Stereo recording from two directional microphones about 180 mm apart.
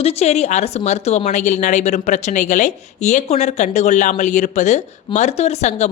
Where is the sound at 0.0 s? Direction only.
35° left (ahead or behind).